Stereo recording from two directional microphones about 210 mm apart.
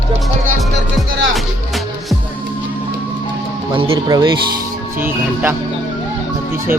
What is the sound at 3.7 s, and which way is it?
Music, 25° right (ahead or behind).